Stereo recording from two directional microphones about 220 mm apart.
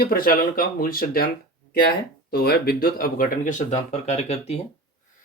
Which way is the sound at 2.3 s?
45° left (ahead or behind).